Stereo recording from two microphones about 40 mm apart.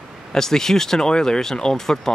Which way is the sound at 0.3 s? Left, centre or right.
Centre.